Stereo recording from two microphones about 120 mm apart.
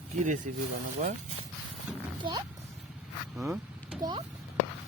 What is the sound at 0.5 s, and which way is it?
Speech, 90° right.